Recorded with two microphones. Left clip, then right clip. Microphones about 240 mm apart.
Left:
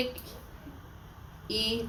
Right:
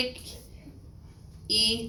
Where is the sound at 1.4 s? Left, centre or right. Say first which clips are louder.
Right 6 dB; centre.